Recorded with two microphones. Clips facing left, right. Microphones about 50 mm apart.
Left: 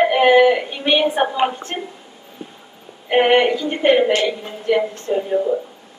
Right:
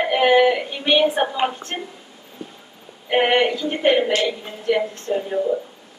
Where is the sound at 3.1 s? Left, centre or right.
Centre.